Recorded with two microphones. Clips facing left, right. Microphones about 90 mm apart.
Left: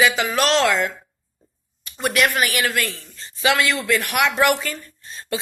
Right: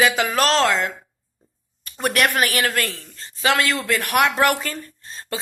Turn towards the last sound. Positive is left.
turn(degrees=-35)  # may be behind; listen again after turning